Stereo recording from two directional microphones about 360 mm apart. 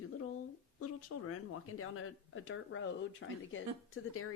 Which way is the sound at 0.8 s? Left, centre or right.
Left.